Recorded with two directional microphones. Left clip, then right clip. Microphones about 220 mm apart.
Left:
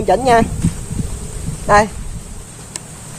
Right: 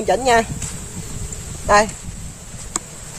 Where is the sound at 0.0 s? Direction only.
Centre (ahead or behind).